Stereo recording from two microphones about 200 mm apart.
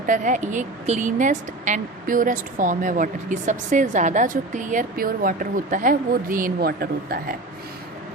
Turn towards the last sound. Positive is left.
turn(degrees=-45)  # may be behind; listen again after turning